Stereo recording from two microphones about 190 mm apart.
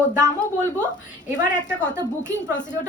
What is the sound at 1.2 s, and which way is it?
Speech, 40° left (ahead or behind).